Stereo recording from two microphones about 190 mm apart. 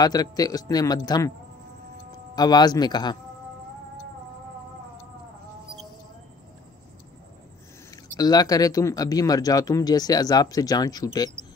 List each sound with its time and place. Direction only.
0.0 s speech: 20° left (ahead or behind)
2.3 s speech: 20° left (ahead or behind)
7.9 s speech: 20° left (ahead or behind)